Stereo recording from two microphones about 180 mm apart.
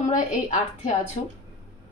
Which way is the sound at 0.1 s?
45° left (ahead or behind).